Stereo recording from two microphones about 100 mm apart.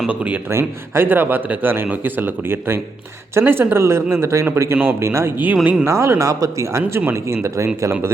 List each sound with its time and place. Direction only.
0.0 s a man's voice: 15° right (ahead or behind)